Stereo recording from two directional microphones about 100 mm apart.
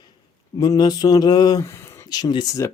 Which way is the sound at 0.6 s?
40° left (ahead or behind).